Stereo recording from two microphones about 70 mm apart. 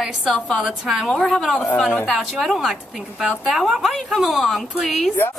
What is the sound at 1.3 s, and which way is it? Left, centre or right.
A man's voice, centre.